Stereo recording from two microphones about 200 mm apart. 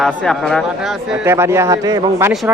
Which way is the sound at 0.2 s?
5° left (ahead or behind).